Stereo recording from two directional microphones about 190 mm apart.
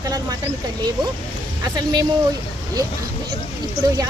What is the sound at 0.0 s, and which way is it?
Speech, 20° right (ahead or behind).